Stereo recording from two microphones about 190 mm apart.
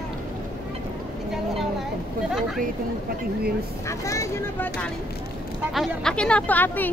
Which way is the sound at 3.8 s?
15° left (ahead or behind).